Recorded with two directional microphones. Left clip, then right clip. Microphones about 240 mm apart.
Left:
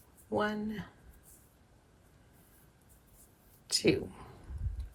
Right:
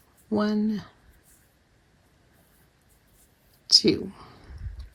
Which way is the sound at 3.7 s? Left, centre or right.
Right.